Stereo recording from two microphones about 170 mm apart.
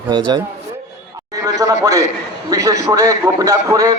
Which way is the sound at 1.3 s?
20° right (ahead or behind).